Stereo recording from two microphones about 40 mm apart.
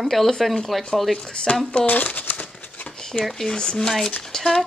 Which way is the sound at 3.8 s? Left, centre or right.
Centre.